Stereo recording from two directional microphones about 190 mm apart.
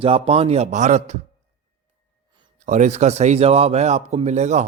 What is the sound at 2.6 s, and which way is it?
A man's voice, 40° right (ahead or behind).